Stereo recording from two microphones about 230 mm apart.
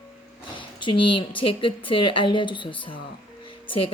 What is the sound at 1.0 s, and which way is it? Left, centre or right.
Speech, left.